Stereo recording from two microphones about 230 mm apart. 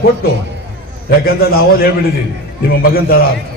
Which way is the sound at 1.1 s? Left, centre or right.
Left.